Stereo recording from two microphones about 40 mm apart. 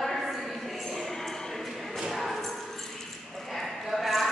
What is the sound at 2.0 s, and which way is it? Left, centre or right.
Thump, centre.